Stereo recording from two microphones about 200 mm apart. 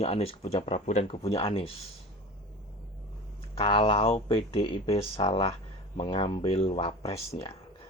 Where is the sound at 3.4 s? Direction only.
25° left (ahead or behind).